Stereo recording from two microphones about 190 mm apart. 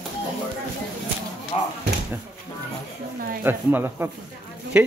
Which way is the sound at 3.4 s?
10° right (ahead or behind).